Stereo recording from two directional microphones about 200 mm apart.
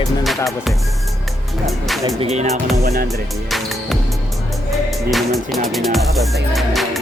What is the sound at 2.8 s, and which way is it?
Speech, 50° right (ahead or behind).